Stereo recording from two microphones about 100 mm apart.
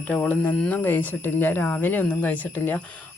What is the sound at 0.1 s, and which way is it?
A woman's voice, 15° left (ahead or behind).